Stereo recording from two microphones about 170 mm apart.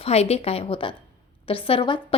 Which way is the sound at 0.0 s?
40° left (ahead or behind).